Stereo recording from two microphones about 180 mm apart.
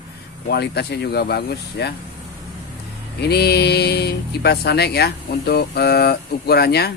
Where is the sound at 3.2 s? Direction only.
65° left (ahead or behind).